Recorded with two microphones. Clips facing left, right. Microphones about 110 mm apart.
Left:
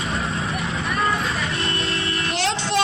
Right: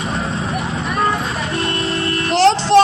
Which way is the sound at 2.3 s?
35° right (ahead or behind).